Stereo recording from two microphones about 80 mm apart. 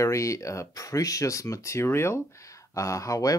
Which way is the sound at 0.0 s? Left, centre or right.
Left.